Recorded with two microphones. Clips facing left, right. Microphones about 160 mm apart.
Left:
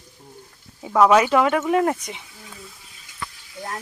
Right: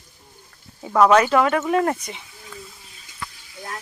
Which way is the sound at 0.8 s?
5° left (ahead or behind).